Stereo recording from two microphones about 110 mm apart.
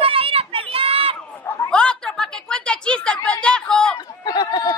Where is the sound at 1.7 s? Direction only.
5° left (ahead or behind).